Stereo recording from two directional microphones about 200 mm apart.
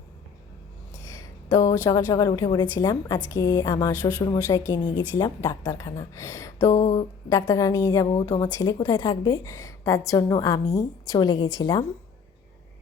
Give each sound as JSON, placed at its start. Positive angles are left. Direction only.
{"t": 1.0, "sound": "a woman's voice", "side_deg": 15}